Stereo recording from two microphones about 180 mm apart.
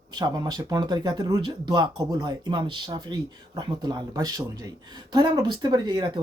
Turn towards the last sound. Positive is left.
turn(degrees=-25)  # may be behind; listen again after turning